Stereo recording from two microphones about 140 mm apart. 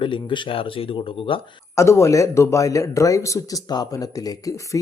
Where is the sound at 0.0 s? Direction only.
35° left (ahead or behind).